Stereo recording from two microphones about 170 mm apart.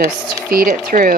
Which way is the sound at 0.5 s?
60° right (ahead or behind).